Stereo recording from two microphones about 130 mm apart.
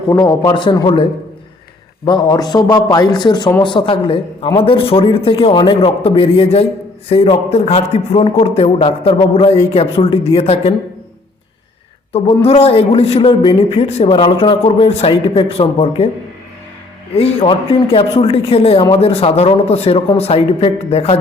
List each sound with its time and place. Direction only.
0.2 s a man's voice: 30° left (ahead or behind)
2.0 s a man's voice: 30° left (ahead or behind); by 10.8 s 50° left (ahead or behind)
12.5 s speech: 50° left (ahead or behind)
14.2 s speech: 40° left (ahead or behind)
17.2 s speech: 50° left (ahead or behind)